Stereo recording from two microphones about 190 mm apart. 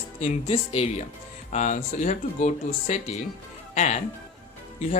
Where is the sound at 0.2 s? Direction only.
35° left (ahead or behind).